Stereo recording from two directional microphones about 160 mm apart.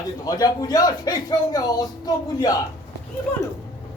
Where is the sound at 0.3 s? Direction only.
20° left (ahead or behind).